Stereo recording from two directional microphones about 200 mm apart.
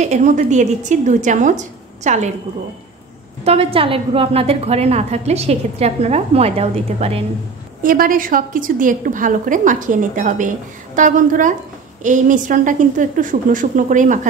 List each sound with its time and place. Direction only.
0.0 s a woman's voice: 35° right (ahead or behind)
3.4 s a woman's voice: 30° right (ahead or behind)
7.8 s a woman's voice: 45° right (ahead or behind)